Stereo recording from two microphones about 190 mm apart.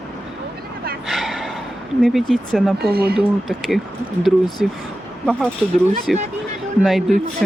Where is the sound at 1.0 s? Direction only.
Centre (ahead or behind).